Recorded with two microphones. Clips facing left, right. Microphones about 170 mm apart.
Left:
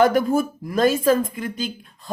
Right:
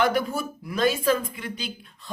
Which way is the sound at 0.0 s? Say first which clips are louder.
Left 7 dB; 45° left (ahead or behind).